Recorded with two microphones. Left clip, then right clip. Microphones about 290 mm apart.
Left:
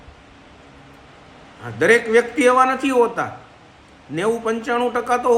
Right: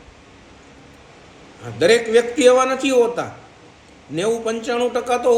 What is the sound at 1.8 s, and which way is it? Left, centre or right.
A man's voice, centre.